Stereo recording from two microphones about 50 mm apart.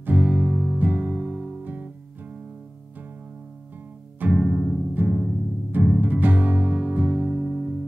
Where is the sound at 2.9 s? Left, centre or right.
Right.